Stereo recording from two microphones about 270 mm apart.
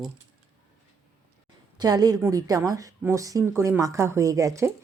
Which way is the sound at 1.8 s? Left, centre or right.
Centre.